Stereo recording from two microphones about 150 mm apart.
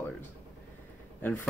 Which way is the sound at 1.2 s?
15° left (ahead or behind).